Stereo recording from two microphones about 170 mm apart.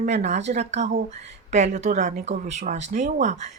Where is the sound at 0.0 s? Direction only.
45° right (ahead or behind).